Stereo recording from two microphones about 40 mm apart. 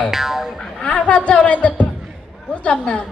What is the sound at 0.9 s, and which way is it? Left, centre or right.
A man's voice, left.